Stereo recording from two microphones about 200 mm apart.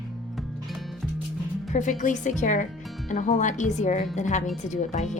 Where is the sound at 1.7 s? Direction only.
40° left (ahead or behind).